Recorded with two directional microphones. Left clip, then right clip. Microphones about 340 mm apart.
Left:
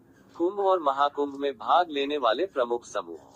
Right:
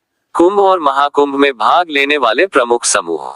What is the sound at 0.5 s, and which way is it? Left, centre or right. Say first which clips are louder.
Speech: right 14 dB; right.